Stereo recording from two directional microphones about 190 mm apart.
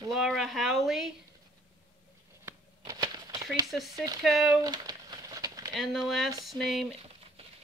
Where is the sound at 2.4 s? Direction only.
20° right (ahead or behind).